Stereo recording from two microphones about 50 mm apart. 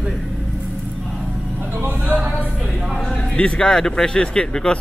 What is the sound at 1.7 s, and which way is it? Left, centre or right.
Vehicle, right.